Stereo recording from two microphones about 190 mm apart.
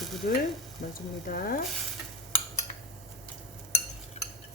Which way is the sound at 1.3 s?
50° left (ahead or behind).